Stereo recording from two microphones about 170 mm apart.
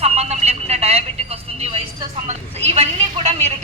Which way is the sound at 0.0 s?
40° right (ahead or behind).